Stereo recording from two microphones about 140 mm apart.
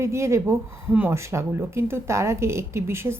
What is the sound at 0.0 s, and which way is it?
Speech, 20° right (ahead or behind).